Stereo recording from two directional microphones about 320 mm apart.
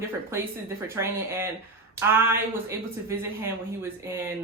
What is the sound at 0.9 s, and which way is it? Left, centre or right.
A woman's voice, centre.